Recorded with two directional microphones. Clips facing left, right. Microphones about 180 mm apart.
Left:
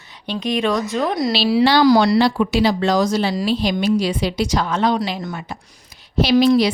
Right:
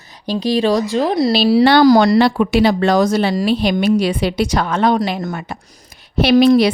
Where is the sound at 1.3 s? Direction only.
45° right (ahead or behind).